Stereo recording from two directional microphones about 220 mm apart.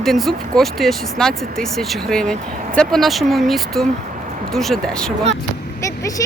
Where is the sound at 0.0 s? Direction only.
Centre (ahead or behind).